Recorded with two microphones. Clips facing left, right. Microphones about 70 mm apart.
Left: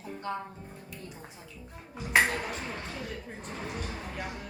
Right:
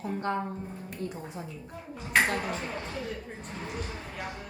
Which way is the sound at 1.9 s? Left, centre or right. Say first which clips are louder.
Left 1 dB; centre.